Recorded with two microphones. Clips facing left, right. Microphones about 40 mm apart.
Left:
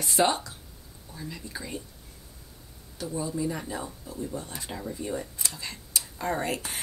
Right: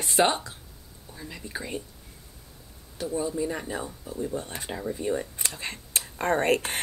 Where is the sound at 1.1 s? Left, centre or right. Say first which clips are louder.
Left 1 dB; centre.